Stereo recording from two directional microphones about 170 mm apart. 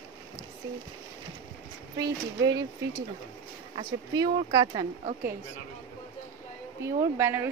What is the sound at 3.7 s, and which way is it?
A woman's voice, 25° right (ahead or behind).